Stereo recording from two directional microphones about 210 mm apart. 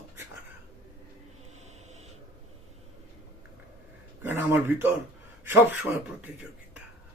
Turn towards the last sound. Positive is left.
turn(degrees=-5)  # may be behind; listen again after turning